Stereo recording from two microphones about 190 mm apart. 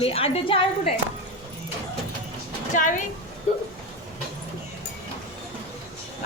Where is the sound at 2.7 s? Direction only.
40° left (ahead or behind).